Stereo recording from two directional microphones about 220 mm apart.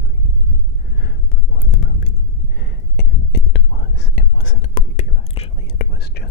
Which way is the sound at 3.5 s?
45° left (ahead or behind).